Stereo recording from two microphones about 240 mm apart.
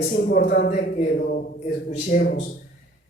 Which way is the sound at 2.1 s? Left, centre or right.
Left.